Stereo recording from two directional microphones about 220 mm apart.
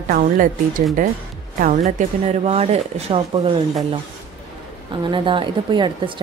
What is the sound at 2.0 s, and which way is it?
Speech, 30° right (ahead or behind).